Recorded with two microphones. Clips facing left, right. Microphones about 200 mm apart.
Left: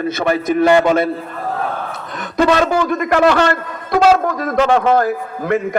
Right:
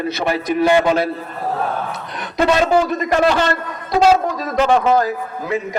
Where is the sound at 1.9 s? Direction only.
50° left (ahead or behind).